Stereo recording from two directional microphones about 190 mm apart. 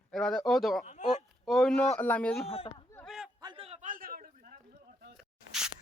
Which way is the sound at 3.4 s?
30° right (ahead or behind).